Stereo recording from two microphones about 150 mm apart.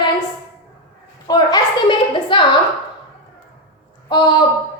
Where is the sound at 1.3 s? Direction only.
25° left (ahead or behind).